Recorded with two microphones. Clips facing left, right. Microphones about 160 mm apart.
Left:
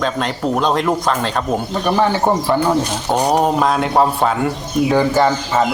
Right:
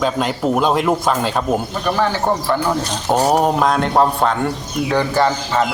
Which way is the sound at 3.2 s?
Centre (ahead or behind).